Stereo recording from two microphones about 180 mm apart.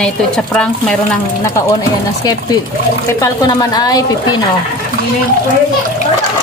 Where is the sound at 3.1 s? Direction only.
20° left (ahead or behind).